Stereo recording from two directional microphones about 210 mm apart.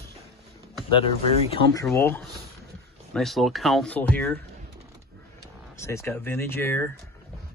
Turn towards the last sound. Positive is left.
turn(degrees=10)  # may be behind; listen again after turning